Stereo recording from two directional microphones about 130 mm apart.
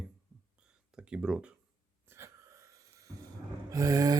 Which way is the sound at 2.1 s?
20° right (ahead or behind).